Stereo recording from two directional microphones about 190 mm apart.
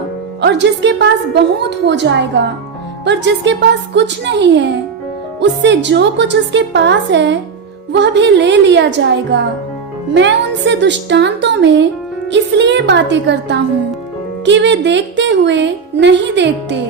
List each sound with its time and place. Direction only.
0.4 s a woman's voice: 65° right (ahead or behind)